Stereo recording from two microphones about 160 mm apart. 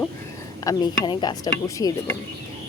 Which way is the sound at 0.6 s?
25° left (ahead or behind).